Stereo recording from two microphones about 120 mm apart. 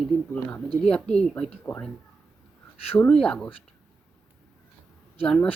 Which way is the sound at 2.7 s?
55° left (ahead or behind).